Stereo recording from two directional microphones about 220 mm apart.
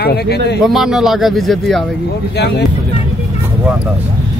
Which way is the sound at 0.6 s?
Centre (ahead or behind).